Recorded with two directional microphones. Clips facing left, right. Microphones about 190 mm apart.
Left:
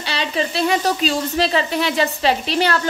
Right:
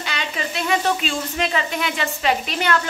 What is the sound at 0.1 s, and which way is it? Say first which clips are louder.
Speech: left 7 dB; 30° left (ahead or behind).